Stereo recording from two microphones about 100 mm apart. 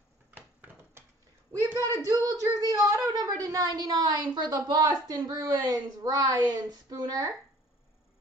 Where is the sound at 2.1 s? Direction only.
35° right (ahead or behind).